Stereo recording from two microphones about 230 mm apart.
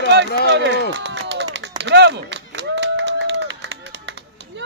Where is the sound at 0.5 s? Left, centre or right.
Right.